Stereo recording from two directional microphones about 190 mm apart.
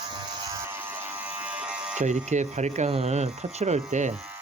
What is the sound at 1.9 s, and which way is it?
Speech, 40° right (ahead or behind).